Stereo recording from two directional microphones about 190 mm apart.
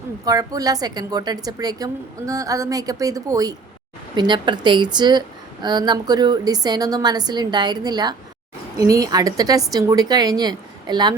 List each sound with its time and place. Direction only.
0.3 s a woman's voice: 20° right (ahead or behind)